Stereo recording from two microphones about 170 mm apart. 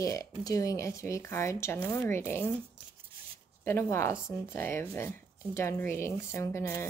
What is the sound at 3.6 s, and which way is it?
Speech, 15° left (ahead or behind).